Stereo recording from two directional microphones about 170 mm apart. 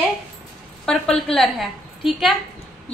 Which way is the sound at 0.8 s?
5° left (ahead or behind).